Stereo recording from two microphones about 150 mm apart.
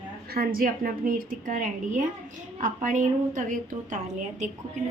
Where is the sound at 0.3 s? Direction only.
80° right; by 4.4 s 55° right (ahead or behind).